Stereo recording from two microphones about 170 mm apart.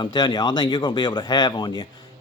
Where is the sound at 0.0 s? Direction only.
25° left (ahead or behind).